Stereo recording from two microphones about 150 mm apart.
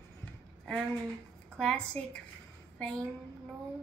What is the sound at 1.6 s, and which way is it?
A woman's voice, 5° left (ahead or behind).